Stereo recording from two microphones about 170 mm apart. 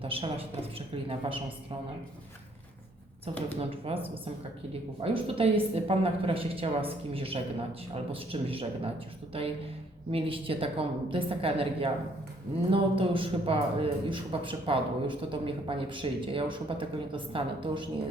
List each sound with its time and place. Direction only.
0.0 s a man's voice: 35° right (ahead or behind)
3.6 s a man's voice: 35° right (ahead or behind)